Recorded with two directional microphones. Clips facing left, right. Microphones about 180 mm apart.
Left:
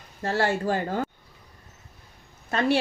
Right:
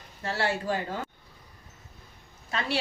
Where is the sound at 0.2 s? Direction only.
45° left (ahead or behind).